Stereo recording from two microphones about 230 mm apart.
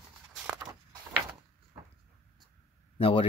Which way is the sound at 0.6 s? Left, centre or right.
Centre.